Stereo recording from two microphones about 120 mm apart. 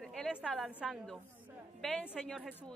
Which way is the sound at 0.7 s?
10° right (ahead or behind).